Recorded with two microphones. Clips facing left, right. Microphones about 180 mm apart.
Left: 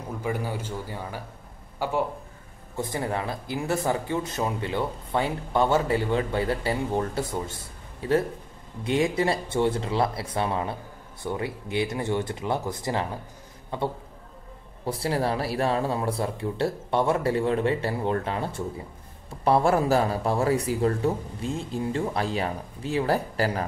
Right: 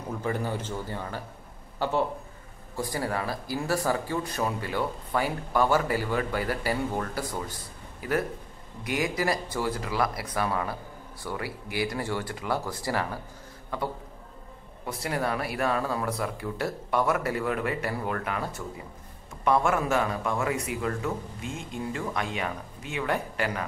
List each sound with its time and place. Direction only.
0.2 s a man's voice: 10° left (ahead or behind)
2.7 s speech: 20° left (ahead or behind)